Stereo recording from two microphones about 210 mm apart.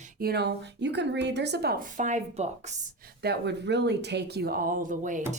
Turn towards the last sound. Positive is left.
turn(degrees=-40)  # may be behind; listen again after turning